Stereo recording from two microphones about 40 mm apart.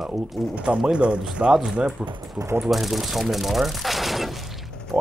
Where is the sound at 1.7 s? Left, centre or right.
Right.